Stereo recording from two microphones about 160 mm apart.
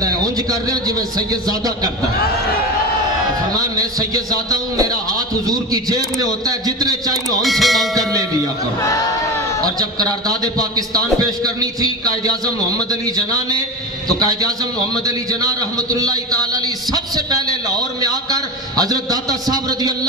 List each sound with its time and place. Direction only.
0.0 s a sound: 25° right (ahead or behind)
4.1 s a man's voice: 25° right (ahead or behind)
7.4 s music: centre (ahead or behind)
11.1 s a man's voice: 25° right (ahead or behind)
15.0 s a man's voice: 20° right (ahead or behind)